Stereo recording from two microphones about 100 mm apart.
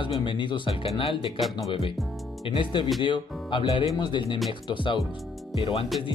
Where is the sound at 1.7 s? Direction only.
60° left (ahead or behind).